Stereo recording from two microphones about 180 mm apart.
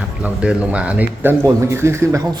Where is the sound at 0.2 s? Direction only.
5° right (ahead or behind).